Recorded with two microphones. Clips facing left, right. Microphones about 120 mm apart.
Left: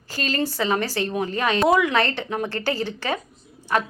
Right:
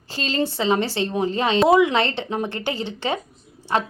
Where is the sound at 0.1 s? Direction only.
25° right (ahead or behind).